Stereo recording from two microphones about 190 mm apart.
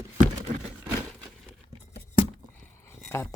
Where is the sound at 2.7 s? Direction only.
15° left (ahead or behind).